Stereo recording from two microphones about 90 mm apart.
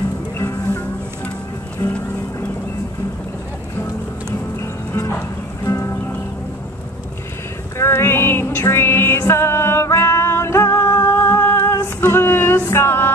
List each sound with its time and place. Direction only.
0.4 s music: 30° left (ahead or behind)
4.6 s music: 35° left (ahead or behind)
7.7 s music: 30° left (ahead or behind)